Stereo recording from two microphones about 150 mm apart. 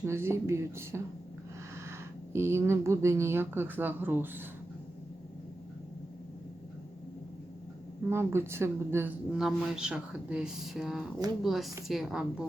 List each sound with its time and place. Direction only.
0.0 s a woman's voice: 15° right (ahead or behind)
2.3 s a woman's voice: 15° right (ahead or behind)
8.1 s a woman's voice: 15° right (ahead or behind)
9.4 s speech: 5° right (ahead or behind)